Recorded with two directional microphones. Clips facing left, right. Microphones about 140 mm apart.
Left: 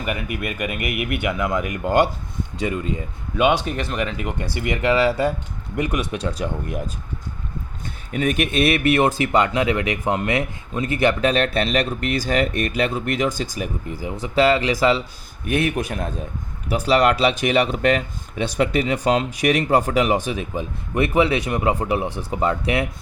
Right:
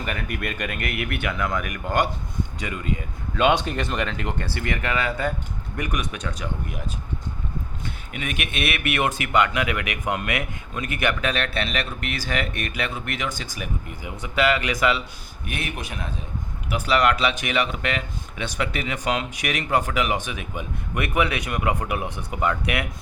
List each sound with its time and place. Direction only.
0.0 s speech: 10° left (ahead or behind)
3.3 s speech: 5° left (ahead or behind); by 6.9 s 30° left (ahead or behind)
8.1 s speech: 40° left (ahead or behind)
15.4 s a man's voice: 45° left (ahead or behind); by 22.9 s 30° left (ahead or behind)